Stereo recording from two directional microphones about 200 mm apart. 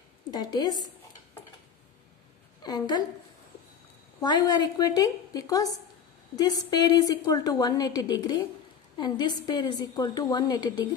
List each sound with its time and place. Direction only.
0.3 s a woman's voice: 20° left (ahead or behind)
2.6 s a woman's voice: 20° left (ahead or behind)
4.2 s a woman's voice: 20° left (ahead or behind)